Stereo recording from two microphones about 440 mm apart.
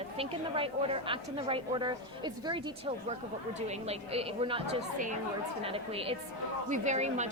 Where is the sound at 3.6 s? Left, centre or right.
Centre.